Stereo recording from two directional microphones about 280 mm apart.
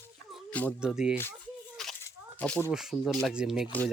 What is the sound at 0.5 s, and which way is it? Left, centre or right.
Speech, centre.